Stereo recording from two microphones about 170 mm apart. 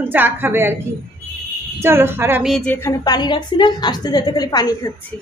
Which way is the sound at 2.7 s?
20° left (ahead or behind).